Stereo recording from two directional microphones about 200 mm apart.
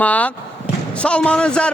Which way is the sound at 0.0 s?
5° left (ahead or behind).